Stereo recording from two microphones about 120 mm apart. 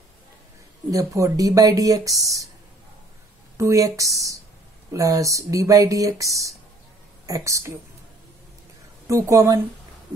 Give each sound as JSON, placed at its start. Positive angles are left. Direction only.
{"t": 0.9, "sound": "speech", "side_deg": -25}
{"t": 3.5, "sound": "speech", "side_deg": -25}
{"t": 9.0, "sound": "speech", "side_deg": -25}